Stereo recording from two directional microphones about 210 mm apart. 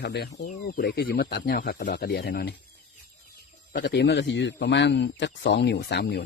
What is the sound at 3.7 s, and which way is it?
A man's voice, 55° left (ahead or behind).